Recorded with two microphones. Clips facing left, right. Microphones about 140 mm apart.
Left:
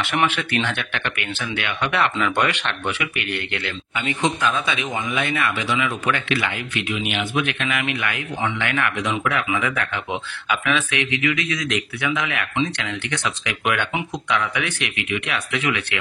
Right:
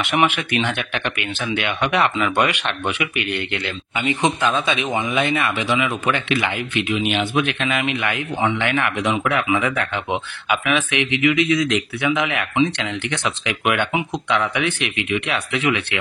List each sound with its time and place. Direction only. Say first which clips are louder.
0.0 s speech: right 3 dB; 15° right (ahead or behind)
10.5 s speech: right 2 dB; 15° right (ahead or behind)